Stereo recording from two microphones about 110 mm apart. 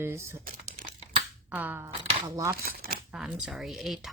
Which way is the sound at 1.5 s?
15° right (ahead or behind).